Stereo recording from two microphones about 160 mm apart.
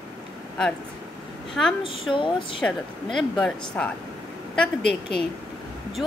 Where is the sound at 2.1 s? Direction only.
30° left (ahead or behind).